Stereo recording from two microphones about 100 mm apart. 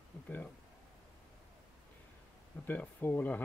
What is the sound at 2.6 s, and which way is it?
Speech, 15° left (ahead or behind).